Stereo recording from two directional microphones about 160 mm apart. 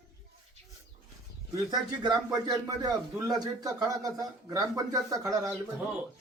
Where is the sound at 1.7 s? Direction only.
25° right (ahead or behind).